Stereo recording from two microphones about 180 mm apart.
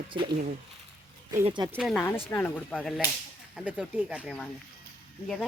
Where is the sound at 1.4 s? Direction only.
25° right (ahead or behind).